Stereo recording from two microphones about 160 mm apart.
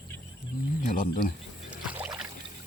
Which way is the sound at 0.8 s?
55° left (ahead or behind).